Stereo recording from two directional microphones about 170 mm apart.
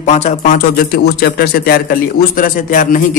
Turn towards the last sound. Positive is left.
turn(degrees=50)  # may be behind; listen again after turning